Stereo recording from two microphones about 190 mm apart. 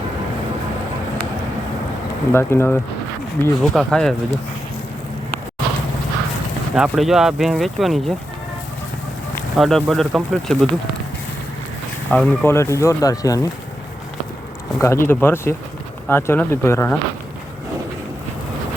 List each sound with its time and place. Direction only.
2.3 s speech: 10° left (ahead or behind)
3.6 s speech: centre (ahead or behind)
6.7 s speech: 5° right (ahead or behind)
9.6 s speech: centre (ahead or behind)
12.1 s speech: 10° left (ahead or behind)
14.8 s speech: 15° left (ahead or behind)